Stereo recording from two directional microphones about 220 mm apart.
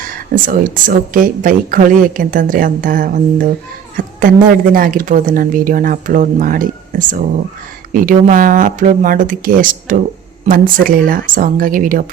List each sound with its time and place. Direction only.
0.0 s a woman's voice: 40° right (ahead or behind)